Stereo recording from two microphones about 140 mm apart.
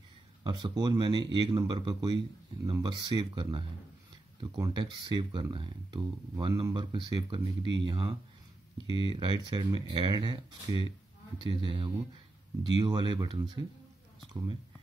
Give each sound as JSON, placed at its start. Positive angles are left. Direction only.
{"t": 0.4, "sound": "speech", "side_deg": -35}